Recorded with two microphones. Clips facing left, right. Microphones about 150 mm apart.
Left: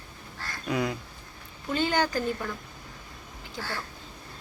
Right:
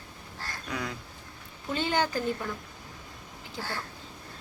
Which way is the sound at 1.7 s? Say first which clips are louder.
Left 2 dB; 25° right (ahead or behind).